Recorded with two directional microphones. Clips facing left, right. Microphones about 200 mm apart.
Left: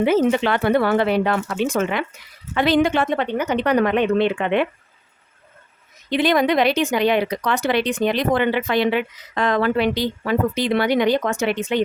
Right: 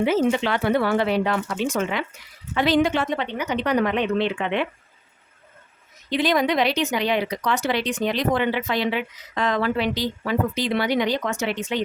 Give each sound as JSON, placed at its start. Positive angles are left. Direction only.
{"t": 0.0, "sound": "speech", "side_deg": 55}
{"t": 6.1, "sound": "speech", "side_deg": 60}